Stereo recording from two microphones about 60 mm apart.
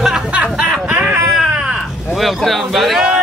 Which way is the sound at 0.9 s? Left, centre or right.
Right.